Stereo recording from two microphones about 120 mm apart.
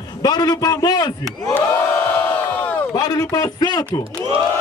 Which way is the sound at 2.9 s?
30° left (ahead or behind).